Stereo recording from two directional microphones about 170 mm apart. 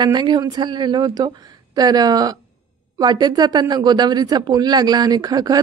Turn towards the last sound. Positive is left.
turn(degrees=-25)  # may be behind; listen again after turning